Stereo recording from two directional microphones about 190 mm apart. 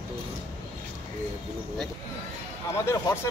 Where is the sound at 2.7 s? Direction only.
15° left (ahead or behind).